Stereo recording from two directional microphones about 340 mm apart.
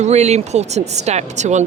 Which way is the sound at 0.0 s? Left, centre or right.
Centre.